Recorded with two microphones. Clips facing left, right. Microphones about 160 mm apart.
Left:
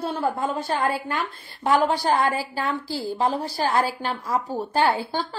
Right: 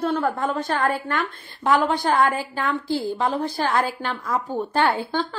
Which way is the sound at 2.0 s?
35° left (ahead or behind).